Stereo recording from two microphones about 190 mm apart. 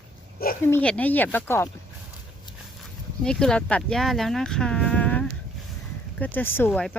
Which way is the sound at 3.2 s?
5° left (ahead or behind).